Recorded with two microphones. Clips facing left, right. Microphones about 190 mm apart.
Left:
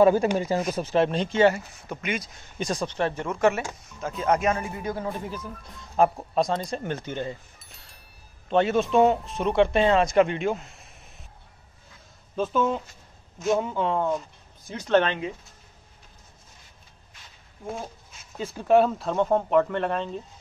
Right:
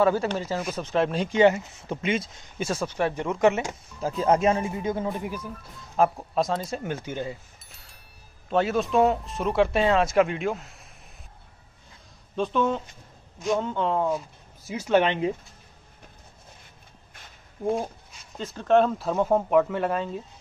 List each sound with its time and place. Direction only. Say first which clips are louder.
0.0 s speech: left 4 dB; 15° left (ahead or behind); by 2.3 s 25° right (ahead or behind)
2.4 s speech: even; 5° right (ahead or behind)
4.0 s speech: right 2 dB; 30° right (ahead or behind); by 5.5 s 15° right (ahead or behind)
5.5 s speech: right 1 dB; centre (ahead or behind)
12.4 s speech: even; 5° left (ahead or behind)
18.4 s speech: left 1 dB; 10° left (ahead or behind)